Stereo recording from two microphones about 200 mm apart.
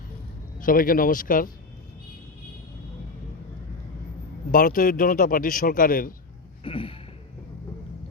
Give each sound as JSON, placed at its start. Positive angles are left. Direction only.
{"t": 0.6, "sound": "a man's voice", "side_deg": 45}
{"t": 4.5, "sound": "a man's voice", "side_deg": 45}
{"t": 6.7, "sound": "a sound", "side_deg": 25}